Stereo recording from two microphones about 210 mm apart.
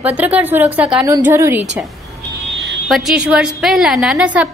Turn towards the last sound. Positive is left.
turn(degrees=-5)  # may be behind; listen again after turning